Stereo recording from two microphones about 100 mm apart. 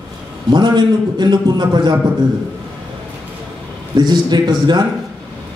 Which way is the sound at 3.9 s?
45° right (ahead or behind).